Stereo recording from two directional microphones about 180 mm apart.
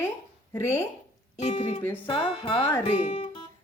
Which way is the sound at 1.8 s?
10° left (ahead or behind).